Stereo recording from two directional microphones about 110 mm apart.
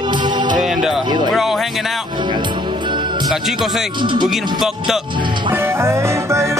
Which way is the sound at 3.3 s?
5° right (ahead or behind).